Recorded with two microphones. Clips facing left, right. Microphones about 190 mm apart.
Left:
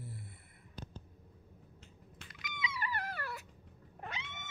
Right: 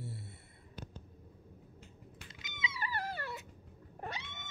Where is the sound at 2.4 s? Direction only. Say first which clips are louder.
Left 1 dB; 25° right (ahead or behind).